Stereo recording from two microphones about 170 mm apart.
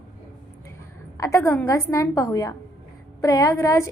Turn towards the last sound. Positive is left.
turn(degrees=20)  # may be behind; listen again after turning